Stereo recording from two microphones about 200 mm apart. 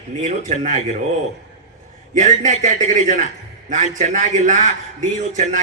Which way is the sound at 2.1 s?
35° right (ahead or behind).